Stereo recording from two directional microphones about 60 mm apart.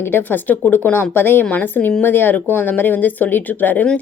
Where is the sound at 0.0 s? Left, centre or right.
Left.